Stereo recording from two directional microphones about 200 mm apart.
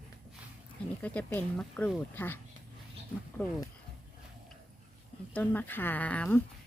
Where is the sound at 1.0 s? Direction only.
10° left (ahead or behind).